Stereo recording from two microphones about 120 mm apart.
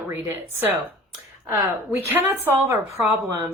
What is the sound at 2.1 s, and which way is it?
A woman's voice, 20° right (ahead or behind).